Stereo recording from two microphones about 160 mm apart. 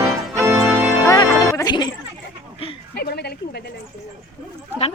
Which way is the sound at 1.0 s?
20° left (ahead or behind).